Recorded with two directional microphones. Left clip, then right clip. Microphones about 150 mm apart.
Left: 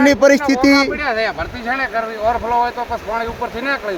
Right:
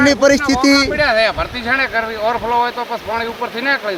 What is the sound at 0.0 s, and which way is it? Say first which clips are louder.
Speech: even; 5° left (ahead or behind).